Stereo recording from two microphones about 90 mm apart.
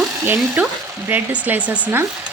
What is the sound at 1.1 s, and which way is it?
Speech, 20° right (ahead or behind).